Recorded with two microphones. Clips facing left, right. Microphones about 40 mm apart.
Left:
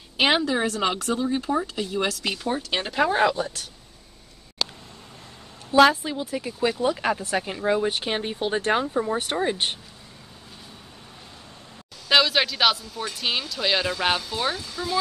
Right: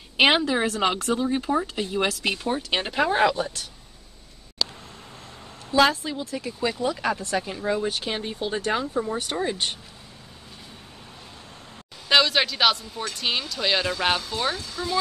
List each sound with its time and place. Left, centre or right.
0.2 s a woman's voice: centre
0.9 s speech: right
1.3 s a woman's voice: centre
1.7 s a woman's voice: right; by 3.6 s centre
5.8 s speech: centre; by 8.8 s left
8.8 s speech: centre
9.1 s speech: left
9.4 s speech: left
12.1 s speech: centre